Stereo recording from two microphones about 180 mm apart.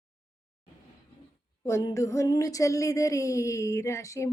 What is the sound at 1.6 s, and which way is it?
Speech, 20° left (ahead or behind).